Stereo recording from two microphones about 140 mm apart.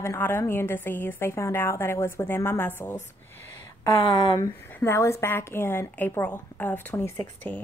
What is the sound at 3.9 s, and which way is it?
Speech, 35° left (ahead or behind).